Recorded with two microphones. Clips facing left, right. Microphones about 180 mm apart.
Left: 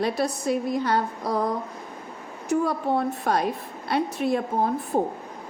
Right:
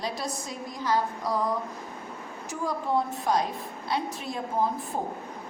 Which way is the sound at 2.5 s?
60° left (ahead or behind).